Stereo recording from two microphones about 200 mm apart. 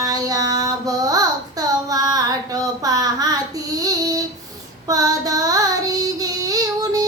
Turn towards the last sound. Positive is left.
turn(degrees=-20)  # may be behind; listen again after turning